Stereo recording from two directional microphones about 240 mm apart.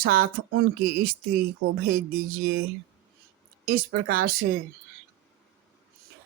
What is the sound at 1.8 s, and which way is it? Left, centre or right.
Speech, right.